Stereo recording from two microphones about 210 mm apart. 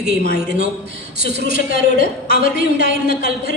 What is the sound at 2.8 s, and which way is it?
Speech, 45° left (ahead or behind).